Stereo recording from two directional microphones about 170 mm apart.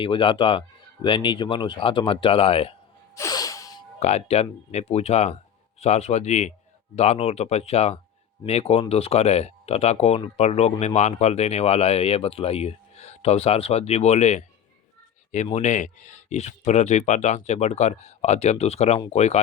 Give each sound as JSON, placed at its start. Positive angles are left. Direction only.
{"t": 0.0, "sound": "speech", "side_deg": 30}
{"t": 3.2, "sound": "music", "side_deg": 20}
{"t": 4.0, "sound": "speech", "side_deg": 40}
{"t": 15.5, "sound": "speech", "side_deg": 45}